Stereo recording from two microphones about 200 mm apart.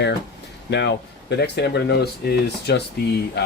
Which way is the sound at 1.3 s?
55° left (ahead or behind).